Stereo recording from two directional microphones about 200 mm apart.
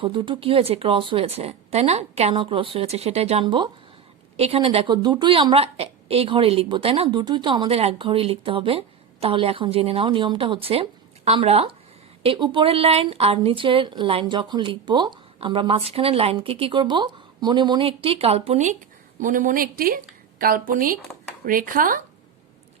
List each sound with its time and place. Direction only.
0.0 s a woman's voice: 25° right (ahead or behind); by 22.0 s 45° right (ahead or behind)